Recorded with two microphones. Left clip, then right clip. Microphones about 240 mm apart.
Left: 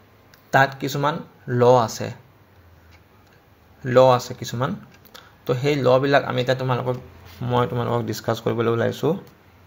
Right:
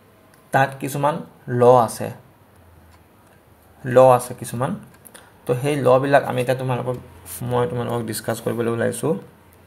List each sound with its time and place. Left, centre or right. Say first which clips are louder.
0.5 s speech: left 1 dB; left
4.0 s speech: right 3 dB; left